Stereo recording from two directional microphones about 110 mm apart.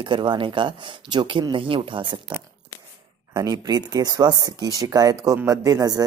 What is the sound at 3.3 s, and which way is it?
Speech, 35° right (ahead or behind).